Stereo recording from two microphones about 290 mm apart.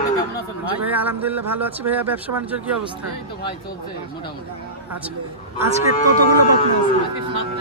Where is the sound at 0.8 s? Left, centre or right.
Centre.